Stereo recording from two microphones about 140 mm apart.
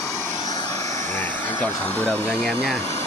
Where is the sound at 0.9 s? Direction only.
60° right (ahead or behind).